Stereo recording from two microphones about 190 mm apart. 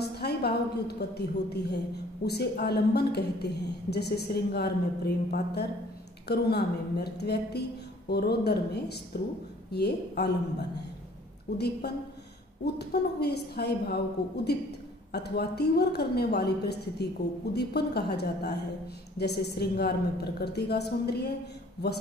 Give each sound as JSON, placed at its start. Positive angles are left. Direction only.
{"t": 0.0, "sound": "a woman's voice", "side_deg": 60}
{"t": 11.5, "sound": "a woman's voice", "side_deg": 60}